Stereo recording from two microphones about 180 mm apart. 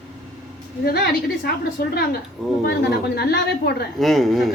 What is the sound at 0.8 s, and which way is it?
A woman's voice, 60° left (ahead or behind).